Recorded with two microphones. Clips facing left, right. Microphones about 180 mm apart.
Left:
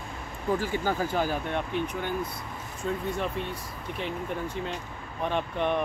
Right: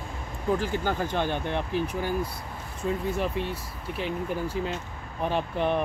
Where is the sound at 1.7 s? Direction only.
35° right (ahead or behind).